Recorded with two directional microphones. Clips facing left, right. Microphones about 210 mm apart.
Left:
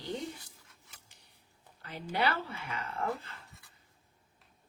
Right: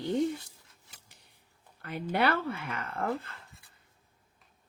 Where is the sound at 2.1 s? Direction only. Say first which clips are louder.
Right 4 dB; 55° right (ahead or behind).